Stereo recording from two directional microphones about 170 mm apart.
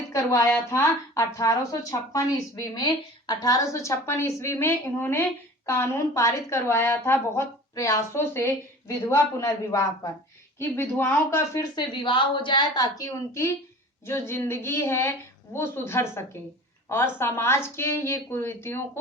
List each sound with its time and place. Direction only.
0.1 s speech: 20° left (ahead or behind)
11.7 s a woman's voice: 30° left (ahead or behind)